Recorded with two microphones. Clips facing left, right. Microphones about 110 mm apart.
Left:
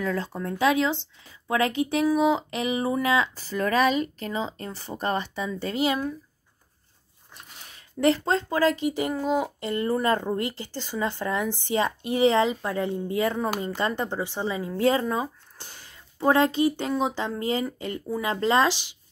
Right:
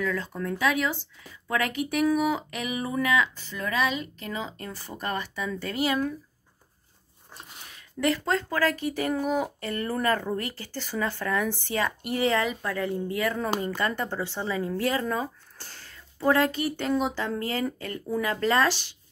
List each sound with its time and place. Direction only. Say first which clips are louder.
0.0 s speech: left 1 dB; 35° left (ahead or behind)
2.1 s a sound: left 4 dB; 25° left (ahead or behind); by 4.3 s 45° left (ahead or behind)
4.3 s speech: left 3 dB; 30° left (ahead or behind)
8.0 s speech: left 3 dB; 25° left (ahead or behind)